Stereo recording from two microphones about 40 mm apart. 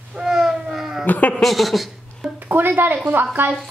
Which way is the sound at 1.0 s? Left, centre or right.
Left.